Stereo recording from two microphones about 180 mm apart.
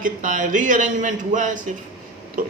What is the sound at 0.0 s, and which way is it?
A man's voice, 45° right (ahead or behind).